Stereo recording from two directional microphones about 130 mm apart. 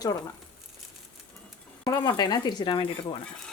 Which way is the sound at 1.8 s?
30° left (ahead or behind).